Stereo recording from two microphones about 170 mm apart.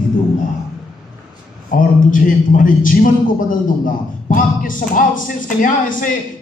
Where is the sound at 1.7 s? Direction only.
50° left (ahead or behind).